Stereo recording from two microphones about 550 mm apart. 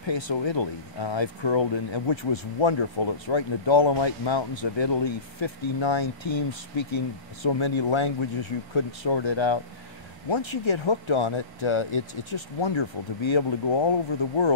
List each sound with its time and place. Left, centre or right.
0.0 s speech: left